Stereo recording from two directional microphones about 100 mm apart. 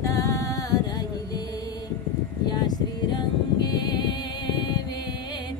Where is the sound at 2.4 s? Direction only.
45° left (ahead or behind).